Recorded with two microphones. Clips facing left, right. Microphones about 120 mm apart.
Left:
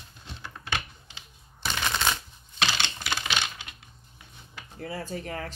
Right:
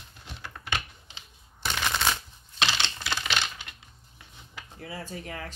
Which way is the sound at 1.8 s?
Centre (ahead or behind).